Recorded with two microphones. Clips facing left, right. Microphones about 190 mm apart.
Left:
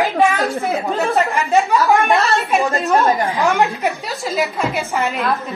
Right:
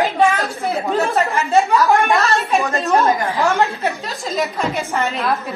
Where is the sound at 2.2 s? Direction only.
15° left (ahead or behind).